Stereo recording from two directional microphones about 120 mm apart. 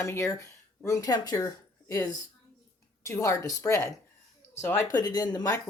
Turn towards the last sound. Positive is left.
turn(degrees=30)  # may be behind; listen again after turning